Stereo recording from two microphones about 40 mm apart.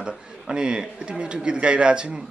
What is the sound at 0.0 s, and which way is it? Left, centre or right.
A man's voice, right.